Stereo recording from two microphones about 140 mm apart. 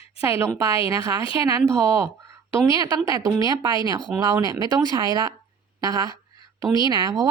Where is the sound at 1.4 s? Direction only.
20° right (ahead or behind).